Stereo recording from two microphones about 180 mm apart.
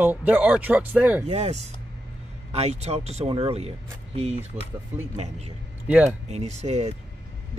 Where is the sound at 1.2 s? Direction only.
35° right (ahead or behind).